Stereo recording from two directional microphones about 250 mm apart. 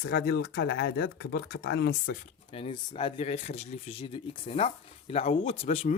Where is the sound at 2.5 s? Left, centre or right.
Left.